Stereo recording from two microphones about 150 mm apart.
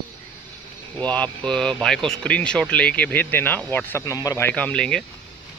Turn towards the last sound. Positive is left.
turn(degrees=5)  # may be behind; listen again after turning